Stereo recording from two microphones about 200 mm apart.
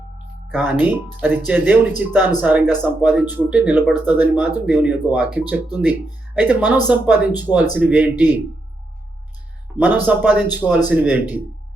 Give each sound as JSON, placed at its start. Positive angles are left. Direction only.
{"t": 0.5, "sound": "speech", "side_deg": -10}
{"t": 9.7, "sound": "speech", "side_deg": -10}